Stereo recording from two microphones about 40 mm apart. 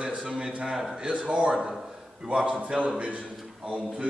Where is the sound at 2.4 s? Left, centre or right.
Right.